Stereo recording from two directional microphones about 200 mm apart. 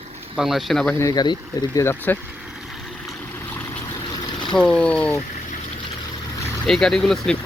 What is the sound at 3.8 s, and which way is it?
Vehicle, 20° left (ahead or behind).